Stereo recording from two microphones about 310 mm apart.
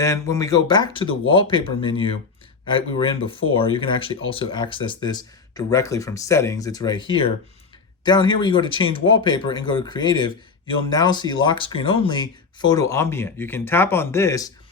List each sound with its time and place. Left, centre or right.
0.0 s speech: centre
8.0 s speech: centre